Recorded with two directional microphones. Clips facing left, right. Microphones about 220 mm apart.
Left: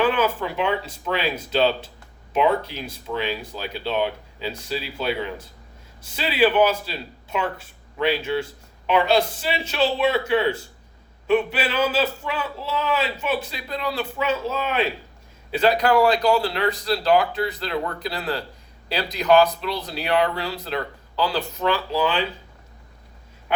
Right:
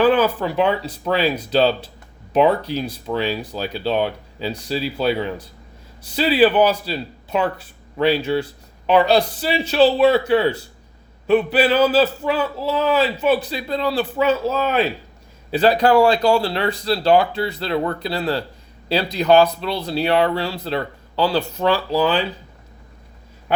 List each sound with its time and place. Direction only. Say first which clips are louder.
0.0 s a man's voice: right 5 dB; 35° right (ahead or behind)